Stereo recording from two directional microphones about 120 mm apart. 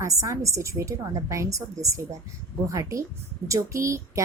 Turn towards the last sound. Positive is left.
turn(degrees=-25)  # may be behind; listen again after turning